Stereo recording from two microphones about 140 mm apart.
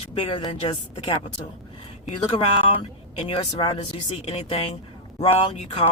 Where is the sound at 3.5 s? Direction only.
35° left (ahead or behind).